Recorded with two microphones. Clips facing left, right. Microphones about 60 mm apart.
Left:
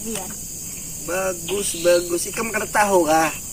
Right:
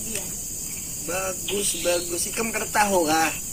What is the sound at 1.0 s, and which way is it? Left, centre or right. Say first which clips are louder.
Speech: left 5 dB; left.